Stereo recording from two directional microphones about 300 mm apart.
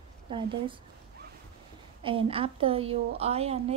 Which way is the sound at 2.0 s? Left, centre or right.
Centre.